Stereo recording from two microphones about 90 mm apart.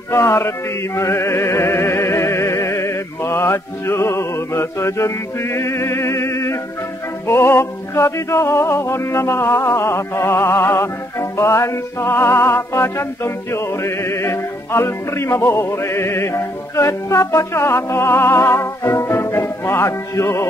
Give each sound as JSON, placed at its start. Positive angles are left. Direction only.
{"t": 0.1, "sound": "music", "side_deg": 30}